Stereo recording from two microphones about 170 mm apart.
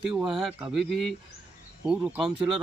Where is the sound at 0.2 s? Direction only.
Centre (ahead or behind).